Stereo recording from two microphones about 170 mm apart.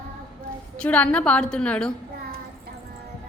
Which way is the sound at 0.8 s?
5° left (ahead or behind).